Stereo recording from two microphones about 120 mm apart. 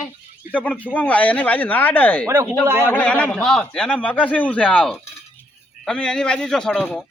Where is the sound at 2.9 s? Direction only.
10° left (ahead or behind).